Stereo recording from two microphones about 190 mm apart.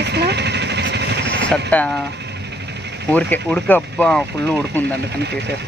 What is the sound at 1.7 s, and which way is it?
Speech, 5° left (ahead or behind).